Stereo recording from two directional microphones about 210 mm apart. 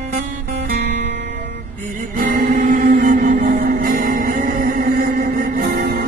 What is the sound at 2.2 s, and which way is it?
Music, 45° right (ahead or behind).